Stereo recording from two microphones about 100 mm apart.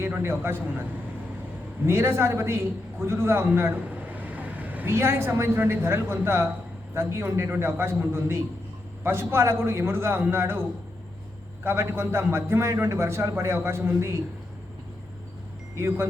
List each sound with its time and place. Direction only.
0.0 s a man's voice: 25° right (ahead or behind)
1.9 s a man's voice: 25° right (ahead or behind)
15.7 s a man's voice: 25° right (ahead or behind)